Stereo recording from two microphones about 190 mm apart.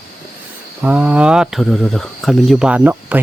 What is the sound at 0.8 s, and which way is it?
Speech, 5° right (ahead or behind).